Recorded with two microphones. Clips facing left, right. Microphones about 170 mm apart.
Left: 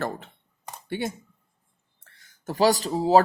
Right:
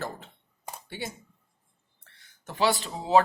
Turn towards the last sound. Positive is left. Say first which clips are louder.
# left 6 dB
turn(degrees=40)  # may be behind; listen again after turning